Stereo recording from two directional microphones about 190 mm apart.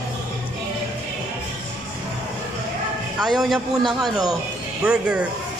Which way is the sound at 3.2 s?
Centre (ahead or behind).